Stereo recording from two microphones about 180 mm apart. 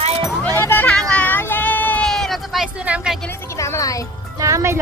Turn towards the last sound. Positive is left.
turn(degrees=-15)  # may be behind; listen again after turning